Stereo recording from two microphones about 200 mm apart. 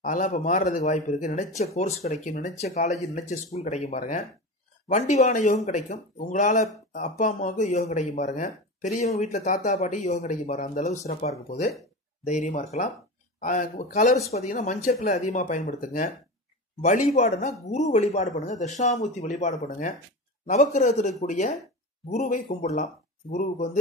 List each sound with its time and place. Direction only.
0.0 s speech: 40° left (ahead or behind)